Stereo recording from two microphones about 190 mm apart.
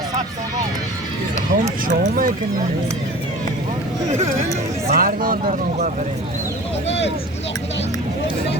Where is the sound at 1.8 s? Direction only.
45° right (ahead or behind).